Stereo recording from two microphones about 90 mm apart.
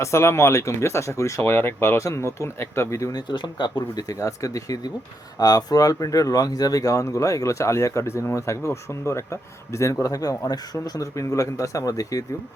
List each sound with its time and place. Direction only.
0.0 s speech: 30° left (ahead or behind)
3.2 s speech: 55° left (ahead or behind); by 12.2 s 40° left (ahead or behind)